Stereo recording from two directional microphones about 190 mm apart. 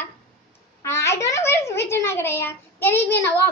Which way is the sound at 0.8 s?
15° left (ahead or behind).